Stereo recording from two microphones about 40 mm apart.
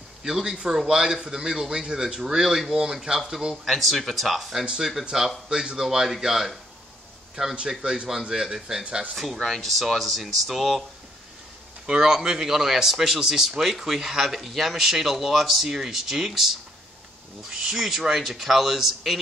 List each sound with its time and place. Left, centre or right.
0.2 s speech: centre
3.6 s speech: centre
7.4 s speech: right; by 10.8 s centre
11.8 s speech: centre